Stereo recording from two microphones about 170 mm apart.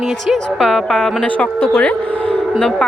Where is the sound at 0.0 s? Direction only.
Centre (ahead or behind).